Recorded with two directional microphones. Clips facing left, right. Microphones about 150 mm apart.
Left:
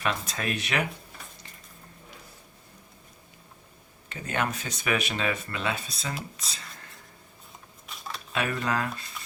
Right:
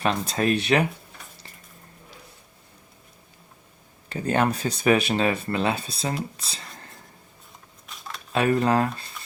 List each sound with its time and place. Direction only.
0.0 s speech: 30° right (ahead or behind)
4.1 s speech: 35° right (ahead or behind)
7.9 s a sound: centre (ahead or behind)
8.3 s speech: 35° right (ahead or behind)